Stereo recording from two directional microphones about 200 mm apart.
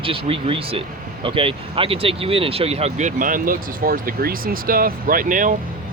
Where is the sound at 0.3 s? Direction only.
30° right (ahead or behind).